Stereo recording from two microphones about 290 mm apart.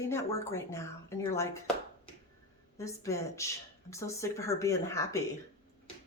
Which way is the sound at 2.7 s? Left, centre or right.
Centre.